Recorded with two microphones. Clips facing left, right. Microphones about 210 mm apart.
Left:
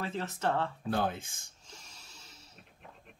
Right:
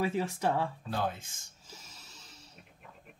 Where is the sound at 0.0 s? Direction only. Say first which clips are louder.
Right 4 dB; 10° right (ahead or behind).